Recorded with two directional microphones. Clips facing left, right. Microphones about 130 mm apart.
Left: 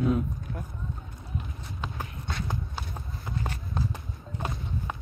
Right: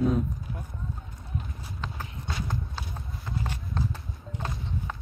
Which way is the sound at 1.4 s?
5° right (ahead or behind).